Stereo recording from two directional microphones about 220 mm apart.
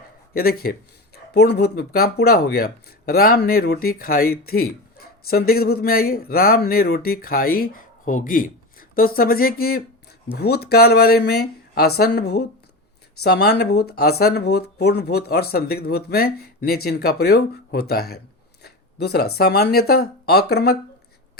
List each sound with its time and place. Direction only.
0.3 s speech: 45° left (ahead or behind)